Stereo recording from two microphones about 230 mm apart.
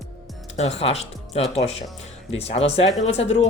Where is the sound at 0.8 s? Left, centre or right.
Left.